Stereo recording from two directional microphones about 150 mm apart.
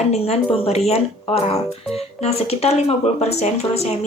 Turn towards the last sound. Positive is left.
turn(degrees=45)  # may be behind; listen again after turning